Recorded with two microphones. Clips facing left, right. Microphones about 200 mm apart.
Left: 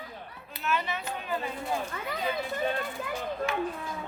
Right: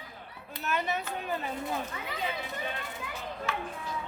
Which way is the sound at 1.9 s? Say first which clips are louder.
Left 3 dB; 45° left (ahead or behind).